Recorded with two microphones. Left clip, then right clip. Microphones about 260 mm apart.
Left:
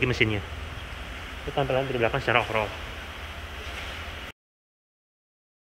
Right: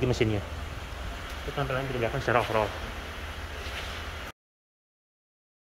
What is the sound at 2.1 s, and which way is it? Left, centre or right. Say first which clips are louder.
Speech: right 2 dB; centre.